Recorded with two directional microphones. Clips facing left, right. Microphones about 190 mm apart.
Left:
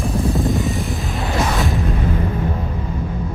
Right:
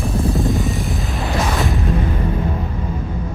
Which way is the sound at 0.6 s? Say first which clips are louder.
Even; centre (ahead or behind).